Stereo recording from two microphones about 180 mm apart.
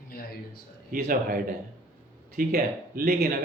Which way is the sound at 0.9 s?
55° right (ahead or behind).